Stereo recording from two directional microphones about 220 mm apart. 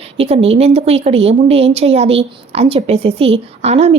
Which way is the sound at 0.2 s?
25° right (ahead or behind).